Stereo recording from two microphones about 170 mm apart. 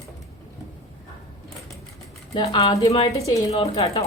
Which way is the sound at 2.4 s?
30° left (ahead or behind).